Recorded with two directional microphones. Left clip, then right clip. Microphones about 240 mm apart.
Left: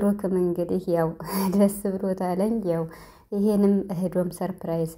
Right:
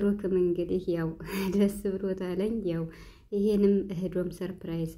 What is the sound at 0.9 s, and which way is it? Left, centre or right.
A woman's voice, centre.